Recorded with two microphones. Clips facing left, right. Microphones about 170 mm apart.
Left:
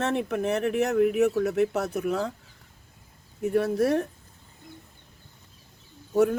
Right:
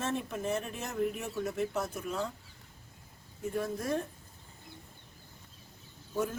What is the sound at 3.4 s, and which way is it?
Speech, 70° left (ahead or behind).